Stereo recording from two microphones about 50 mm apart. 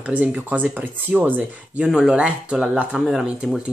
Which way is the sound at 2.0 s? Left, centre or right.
Centre.